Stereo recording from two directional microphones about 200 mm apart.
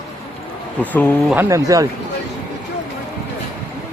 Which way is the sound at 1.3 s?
15° right (ahead or behind).